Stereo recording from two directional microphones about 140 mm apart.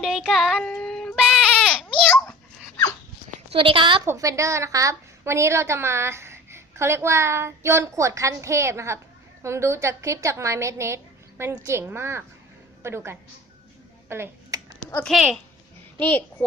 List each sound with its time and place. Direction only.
0.0 s child singing: centre (ahead or behind)
3.5 s a woman's voice: 40° right (ahead or behind)
4.0 s a woman's voice: 20° right (ahead or behind)
14.1 s a sound: 20° right (ahead or behind)
15.0 s a woman's voice: centre (ahead or behind)
16.0 s a child's voice: 10° left (ahead or behind)